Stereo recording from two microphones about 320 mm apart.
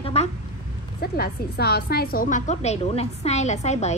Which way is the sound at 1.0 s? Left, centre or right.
Left.